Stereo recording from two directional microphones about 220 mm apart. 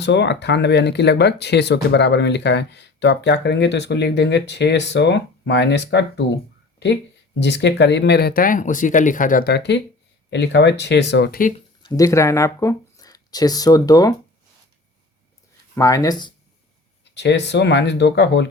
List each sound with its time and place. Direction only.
0.0 s speech: 50° left (ahead or behind)
11.8 s speech: 15° left (ahead or behind)
15.7 s speech: 15° left (ahead or behind)
17.2 s speech: 50° left (ahead or behind)